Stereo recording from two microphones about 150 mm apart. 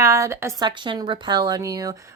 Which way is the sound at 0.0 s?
20° right (ahead or behind).